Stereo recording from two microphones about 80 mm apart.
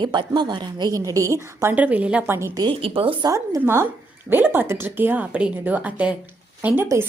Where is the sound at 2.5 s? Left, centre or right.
Right.